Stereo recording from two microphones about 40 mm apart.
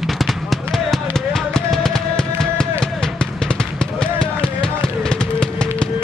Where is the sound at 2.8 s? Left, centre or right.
Centre.